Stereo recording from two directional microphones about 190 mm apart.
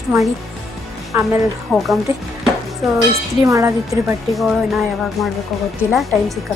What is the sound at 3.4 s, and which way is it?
Speech, 15° right (ahead or behind).